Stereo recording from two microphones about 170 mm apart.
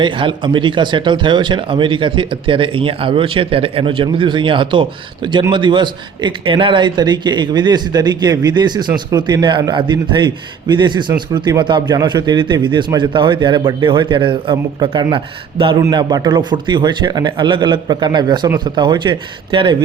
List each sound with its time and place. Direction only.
0.0 s speech: 30° right (ahead or behind)